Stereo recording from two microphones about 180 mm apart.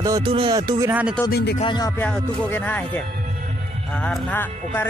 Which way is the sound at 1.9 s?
10° left (ahead or behind).